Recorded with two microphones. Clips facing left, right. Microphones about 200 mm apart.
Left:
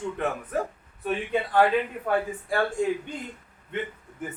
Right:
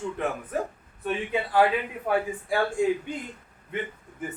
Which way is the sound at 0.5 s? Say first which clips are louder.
Left 1 dB; centre (ahead or behind).